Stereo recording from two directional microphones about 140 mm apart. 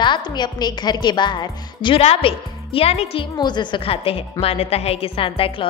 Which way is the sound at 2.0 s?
45° left (ahead or behind).